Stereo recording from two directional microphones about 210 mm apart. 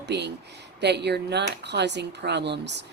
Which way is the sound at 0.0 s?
55° right (ahead or behind).